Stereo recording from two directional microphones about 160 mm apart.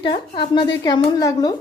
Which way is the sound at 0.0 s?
30° left (ahead or behind).